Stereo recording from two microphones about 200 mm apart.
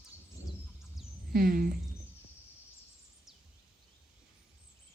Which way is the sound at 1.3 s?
45° right (ahead or behind).